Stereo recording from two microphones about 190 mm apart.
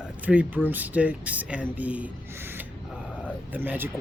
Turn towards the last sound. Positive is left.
turn(degrees=-10)  # may be behind; listen again after turning